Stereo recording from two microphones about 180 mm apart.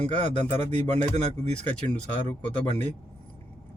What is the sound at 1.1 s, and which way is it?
Speech, 35° right (ahead or behind).